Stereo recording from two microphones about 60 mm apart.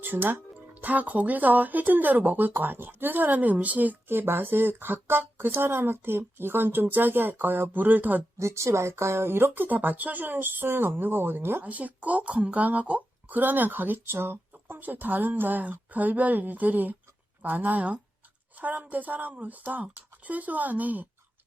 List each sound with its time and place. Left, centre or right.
0.0 s speech: right
8.4 s speech: right
11.6 s speech: right